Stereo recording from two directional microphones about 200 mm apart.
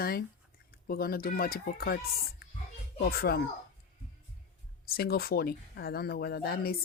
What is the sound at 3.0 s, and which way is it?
Speech, 50° left (ahead or behind).